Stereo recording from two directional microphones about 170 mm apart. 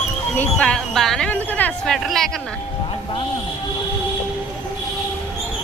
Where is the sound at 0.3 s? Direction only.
5° left (ahead or behind).